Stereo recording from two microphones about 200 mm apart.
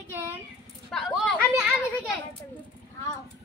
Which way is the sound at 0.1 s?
10° right (ahead or behind).